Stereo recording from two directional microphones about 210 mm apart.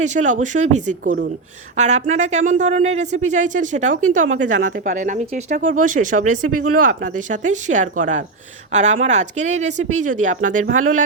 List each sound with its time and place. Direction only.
0.0 s speech: 35° right (ahead or behind)